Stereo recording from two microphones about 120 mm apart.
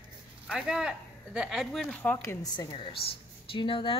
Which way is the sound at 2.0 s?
15° left (ahead or behind).